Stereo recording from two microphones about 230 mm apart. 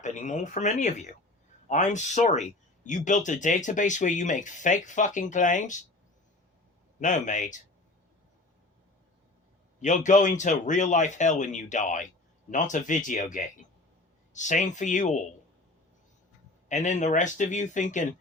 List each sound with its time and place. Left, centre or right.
0.0 s speech: left
7.0 s speech: left
9.8 s speech: left
14.3 s speech: left
16.6 s speech: left